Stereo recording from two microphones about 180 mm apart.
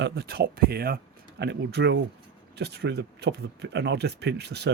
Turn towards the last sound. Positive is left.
turn(degrees=-65)  # may be behind; listen again after turning